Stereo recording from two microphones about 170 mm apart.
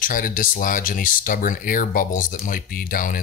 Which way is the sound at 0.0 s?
55° left (ahead or behind).